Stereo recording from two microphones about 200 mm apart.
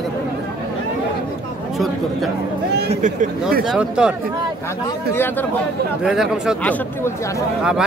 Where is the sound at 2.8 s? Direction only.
35° right (ahead or behind).